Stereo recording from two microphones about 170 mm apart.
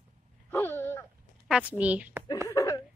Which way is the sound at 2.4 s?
20° left (ahead or behind).